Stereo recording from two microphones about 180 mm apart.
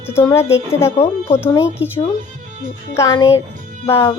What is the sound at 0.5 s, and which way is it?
Speech, 15° left (ahead or behind).